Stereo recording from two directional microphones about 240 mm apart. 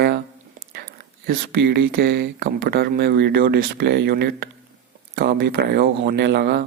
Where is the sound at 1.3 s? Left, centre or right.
Right.